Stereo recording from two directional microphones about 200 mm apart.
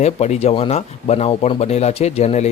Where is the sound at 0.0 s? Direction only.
35° left (ahead or behind).